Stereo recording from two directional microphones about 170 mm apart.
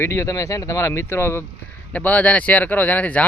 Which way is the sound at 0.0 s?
15° left (ahead or behind).